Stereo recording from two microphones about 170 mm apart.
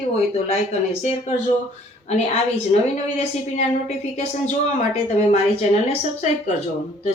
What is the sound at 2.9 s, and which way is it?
A woman's voice, 40° left (ahead or behind).